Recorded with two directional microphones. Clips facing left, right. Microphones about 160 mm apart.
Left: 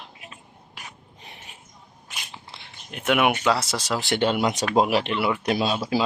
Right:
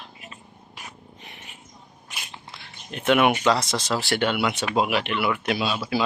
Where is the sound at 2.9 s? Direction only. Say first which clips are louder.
Right 2 dB; 10° left (ahead or behind).